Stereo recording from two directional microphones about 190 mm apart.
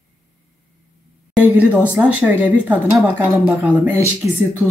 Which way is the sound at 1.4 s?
5° right (ahead or behind).